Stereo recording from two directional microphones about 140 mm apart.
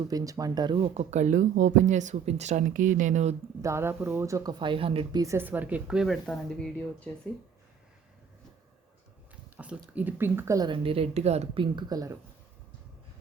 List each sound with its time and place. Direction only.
0.1 s speech: 25° right (ahead or behind)
0.8 s speech: 55° right (ahead or behind)
3.6 s speech: 20° right (ahead or behind)
4.6 s speech: 40° right (ahead or behind)
5.1 s speech: 20° right (ahead or behind); by 7.1 s 5° left (ahead or behind)
9.3 s speech: 10° right (ahead or behind)
10.7 s speech: 40° right (ahead or behind)
11.6 s speech: 30° right (ahead or behind)